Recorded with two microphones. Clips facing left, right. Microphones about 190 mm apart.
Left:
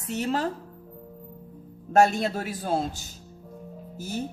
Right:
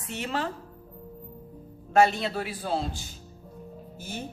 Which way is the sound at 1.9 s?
45° left (ahead or behind).